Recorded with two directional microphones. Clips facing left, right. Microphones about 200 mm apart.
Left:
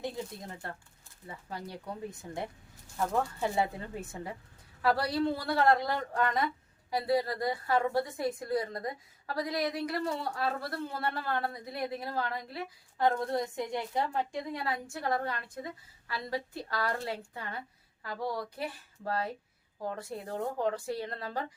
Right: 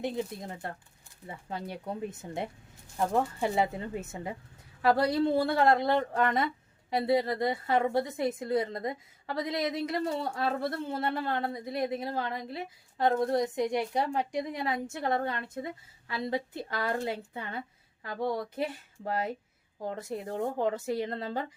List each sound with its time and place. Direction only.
0.0 s a woman's voice: 20° right (ahead or behind)
4.8 s a woman's voice: 25° right (ahead or behind)